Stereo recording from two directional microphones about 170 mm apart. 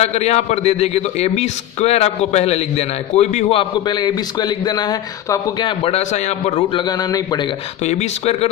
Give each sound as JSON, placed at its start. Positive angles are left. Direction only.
{"t": 0.0, "sound": "a man's voice", "side_deg": 40}
{"t": 7.8, "sound": "a man's voice", "side_deg": 40}